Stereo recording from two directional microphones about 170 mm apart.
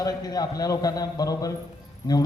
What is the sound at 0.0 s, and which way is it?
A man's voice, 20° left (ahead or behind).